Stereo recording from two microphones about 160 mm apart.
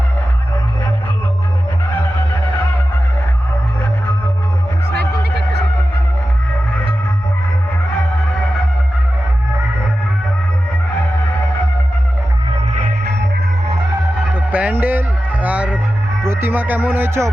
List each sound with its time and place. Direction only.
4.9 s music: 90° right
14.5 s music: 10° right (ahead or behind)